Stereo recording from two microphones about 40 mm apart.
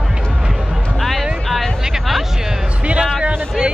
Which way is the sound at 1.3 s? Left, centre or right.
Centre.